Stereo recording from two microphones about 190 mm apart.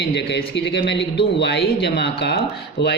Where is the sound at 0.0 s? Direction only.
65° left (ahead or behind).